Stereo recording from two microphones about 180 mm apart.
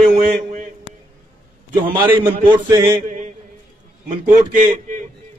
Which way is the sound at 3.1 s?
45° right (ahead or behind).